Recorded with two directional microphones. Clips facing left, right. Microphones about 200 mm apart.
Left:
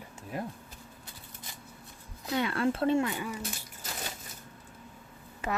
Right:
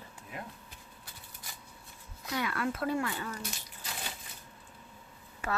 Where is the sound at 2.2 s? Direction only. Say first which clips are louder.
Left 5 dB; 25° left (ahead or behind).